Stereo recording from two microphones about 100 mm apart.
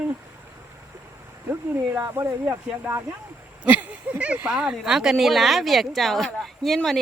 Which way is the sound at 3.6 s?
15° right (ahead or behind).